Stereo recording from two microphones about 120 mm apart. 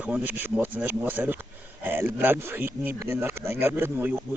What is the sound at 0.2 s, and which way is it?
Speech, 15° right (ahead or behind).